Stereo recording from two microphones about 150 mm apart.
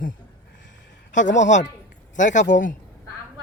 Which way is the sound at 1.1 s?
55° left (ahead or behind).